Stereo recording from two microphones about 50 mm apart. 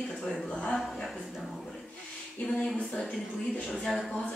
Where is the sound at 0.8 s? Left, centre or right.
Centre.